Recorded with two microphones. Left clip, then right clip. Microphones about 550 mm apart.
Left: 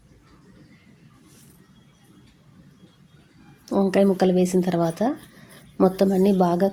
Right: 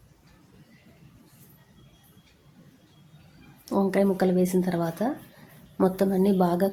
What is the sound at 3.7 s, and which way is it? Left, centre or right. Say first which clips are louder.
Speech: left 4 dB; right.